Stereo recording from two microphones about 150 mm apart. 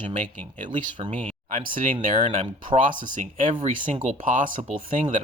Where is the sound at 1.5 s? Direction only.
60° right (ahead or behind).